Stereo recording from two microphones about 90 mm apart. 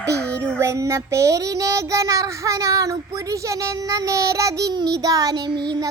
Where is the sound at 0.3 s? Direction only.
15° left (ahead or behind).